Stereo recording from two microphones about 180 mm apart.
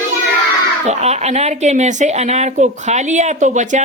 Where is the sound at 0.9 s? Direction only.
35° right (ahead or behind).